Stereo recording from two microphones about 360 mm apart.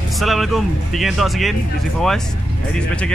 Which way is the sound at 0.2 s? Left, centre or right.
Centre.